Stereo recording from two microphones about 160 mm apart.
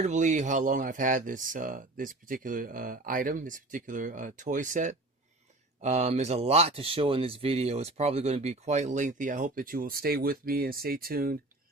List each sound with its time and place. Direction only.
0.0 s speech: 50° right (ahead or behind); by 11.3 s 65° right (ahead or behind)